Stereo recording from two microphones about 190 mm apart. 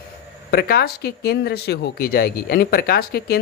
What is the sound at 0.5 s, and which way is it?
Speech, 55° left (ahead or behind).